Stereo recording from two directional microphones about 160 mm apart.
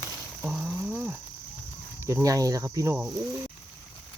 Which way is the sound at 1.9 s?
20° right (ahead or behind).